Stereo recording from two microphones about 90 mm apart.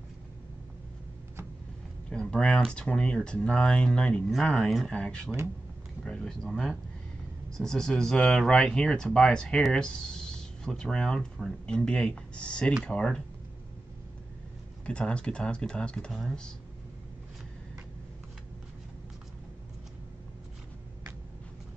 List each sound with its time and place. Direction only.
2.0 s a sound: 10° left (ahead or behind)
2.7 s speech: 10° left (ahead or behind)
14.9 s speech: 10° left (ahead or behind)